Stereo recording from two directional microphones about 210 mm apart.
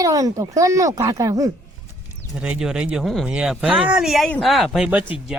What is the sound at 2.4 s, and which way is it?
Speech, 5° right (ahead or behind).